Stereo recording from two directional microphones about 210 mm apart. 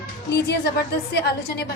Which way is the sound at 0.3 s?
50° left (ahead or behind).